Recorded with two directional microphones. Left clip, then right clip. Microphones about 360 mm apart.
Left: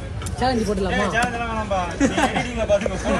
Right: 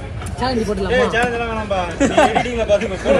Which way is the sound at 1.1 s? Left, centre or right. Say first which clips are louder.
Right 4 dB; centre.